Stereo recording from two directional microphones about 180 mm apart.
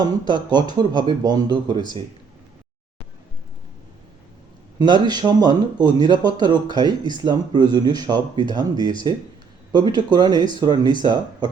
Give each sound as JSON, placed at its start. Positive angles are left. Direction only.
{"t": 0.0, "sound": "speech", "side_deg": -25}
{"t": 4.8, "sound": "speech", "side_deg": -25}